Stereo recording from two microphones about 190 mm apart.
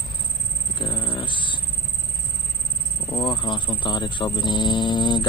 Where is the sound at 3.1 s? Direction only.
25° left (ahead or behind).